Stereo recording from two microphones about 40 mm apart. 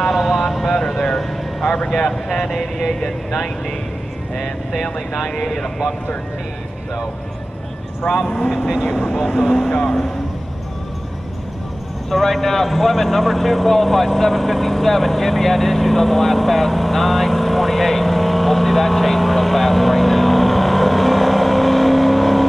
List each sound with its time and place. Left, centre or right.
0.1 s vehicle: centre
0.7 s vehicle: centre
2.0 s speech: centre
5.3 s speech: centre
8.8 s speech: left
9.3 s speech: centre
12.1 s speech: centre